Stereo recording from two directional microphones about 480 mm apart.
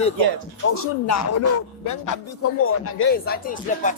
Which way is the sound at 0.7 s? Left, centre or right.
Left.